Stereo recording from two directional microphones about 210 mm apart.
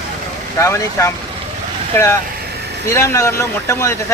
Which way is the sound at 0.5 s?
15° left (ahead or behind).